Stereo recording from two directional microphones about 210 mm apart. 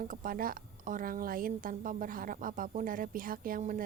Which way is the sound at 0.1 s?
40° right (ahead or behind).